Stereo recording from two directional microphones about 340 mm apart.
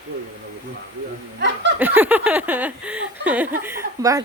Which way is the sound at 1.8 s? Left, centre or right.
Centre.